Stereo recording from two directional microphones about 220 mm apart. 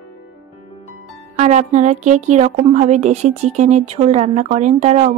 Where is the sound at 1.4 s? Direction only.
30° right (ahead or behind).